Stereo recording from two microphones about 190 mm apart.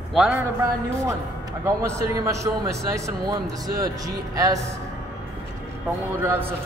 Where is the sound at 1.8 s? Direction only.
15° right (ahead or behind).